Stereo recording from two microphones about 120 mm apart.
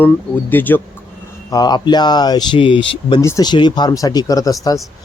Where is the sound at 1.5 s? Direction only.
35° left (ahead or behind).